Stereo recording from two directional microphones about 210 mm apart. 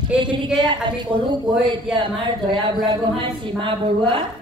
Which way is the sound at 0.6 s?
20° right (ahead or behind).